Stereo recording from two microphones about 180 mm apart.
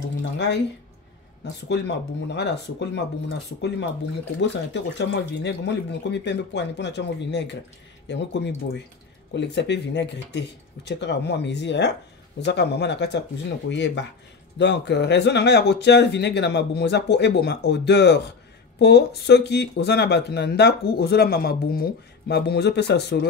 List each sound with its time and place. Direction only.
0.2 s speech: 75° left (ahead or behind)
4.9 s speech: 75° left (ahead or behind)